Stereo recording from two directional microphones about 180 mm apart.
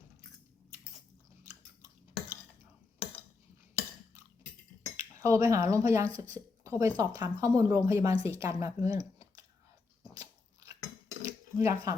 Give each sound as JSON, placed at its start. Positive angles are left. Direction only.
{"t": 5.2, "sound": "a woman's voice", "side_deg": -15}
{"t": 10.2, "sound": "biting", "side_deg": -20}
{"t": 11.2, "sound": "a sound", "side_deg": -15}